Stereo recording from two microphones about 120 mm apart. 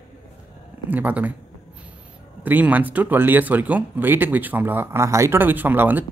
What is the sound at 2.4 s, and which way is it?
Speech, 15° right (ahead or behind).